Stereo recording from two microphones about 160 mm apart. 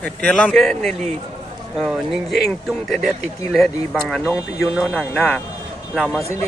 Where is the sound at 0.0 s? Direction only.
5° left (ahead or behind).